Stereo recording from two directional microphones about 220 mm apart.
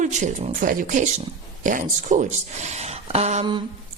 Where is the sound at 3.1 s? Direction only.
30° right (ahead or behind).